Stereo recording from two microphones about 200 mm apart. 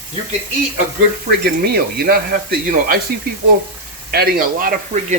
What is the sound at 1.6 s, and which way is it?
Speech, 50° right (ahead or behind).